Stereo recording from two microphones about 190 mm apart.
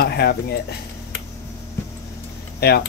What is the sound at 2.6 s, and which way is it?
Speech, 55° left (ahead or behind).